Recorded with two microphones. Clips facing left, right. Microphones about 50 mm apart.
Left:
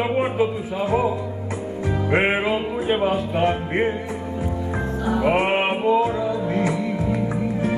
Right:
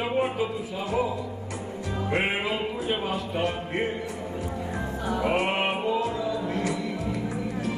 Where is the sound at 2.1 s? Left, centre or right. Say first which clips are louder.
Left 7 dB; left.